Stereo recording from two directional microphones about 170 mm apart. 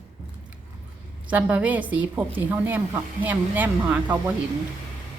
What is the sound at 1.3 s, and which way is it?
Speech, 10° right (ahead or behind).